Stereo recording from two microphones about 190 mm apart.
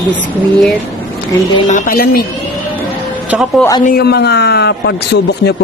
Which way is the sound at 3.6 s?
5° left (ahead or behind).